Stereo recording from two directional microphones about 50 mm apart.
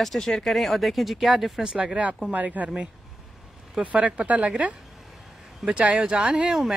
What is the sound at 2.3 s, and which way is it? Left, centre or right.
Speech, right.